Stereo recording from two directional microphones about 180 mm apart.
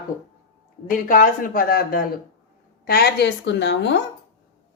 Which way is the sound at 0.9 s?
50° left (ahead or behind).